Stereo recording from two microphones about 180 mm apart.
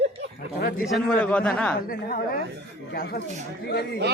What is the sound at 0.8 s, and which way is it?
Speech, centre (ahead or behind).